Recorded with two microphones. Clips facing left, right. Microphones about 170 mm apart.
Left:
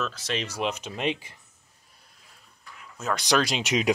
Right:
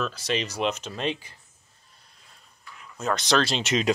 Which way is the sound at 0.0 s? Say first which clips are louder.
Right 2 dB; centre (ahead or behind).